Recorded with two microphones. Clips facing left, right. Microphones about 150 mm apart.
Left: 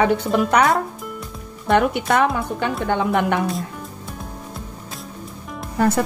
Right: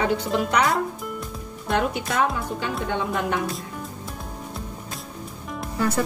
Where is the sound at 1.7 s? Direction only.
60° left (ahead or behind).